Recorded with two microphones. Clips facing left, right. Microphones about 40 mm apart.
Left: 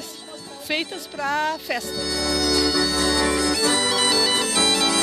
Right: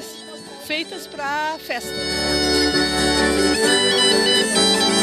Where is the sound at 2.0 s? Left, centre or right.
Right.